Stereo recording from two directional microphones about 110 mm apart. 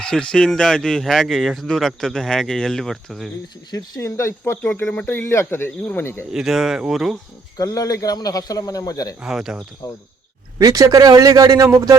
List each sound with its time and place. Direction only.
0.0 s speech: 10° left (ahead or behind)
3.7 s speech: 35° left (ahead or behind); by 6.1 s 15° left (ahead or behind)
6.3 s speech: centre (ahead or behind)
7.5 s a man's voice: 35° left (ahead or behind)
9.2 s speech: 5° right (ahead or behind)
10.6 s a man's voice: 30° right (ahead or behind)